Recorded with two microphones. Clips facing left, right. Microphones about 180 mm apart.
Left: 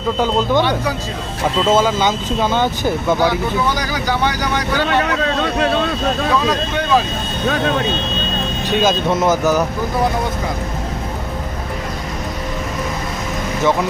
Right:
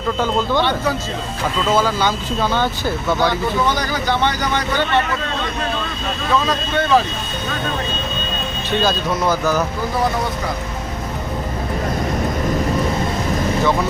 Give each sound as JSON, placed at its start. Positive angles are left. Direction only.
{"t": 0.2, "sound": "speech", "side_deg": 15}
{"t": 1.5, "sound": "speech", "side_deg": 25}
{"t": 5.5, "sound": "speech", "side_deg": 65}
{"t": 6.5, "sound": "speech", "side_deg": 15}
{"t": 8.7, "sound": "speech", "side_deg": 20}